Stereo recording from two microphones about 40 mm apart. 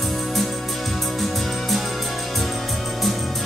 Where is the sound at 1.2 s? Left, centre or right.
Centre.